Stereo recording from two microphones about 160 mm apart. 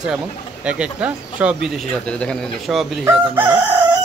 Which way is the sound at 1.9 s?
5° left (ahead or behind).